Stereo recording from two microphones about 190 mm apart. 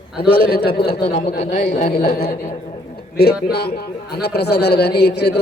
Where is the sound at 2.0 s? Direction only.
55° left (ahead or behind).